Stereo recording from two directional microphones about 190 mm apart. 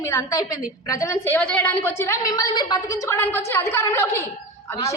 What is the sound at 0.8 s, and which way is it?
A woman's voice, 15° left (ahead or behind).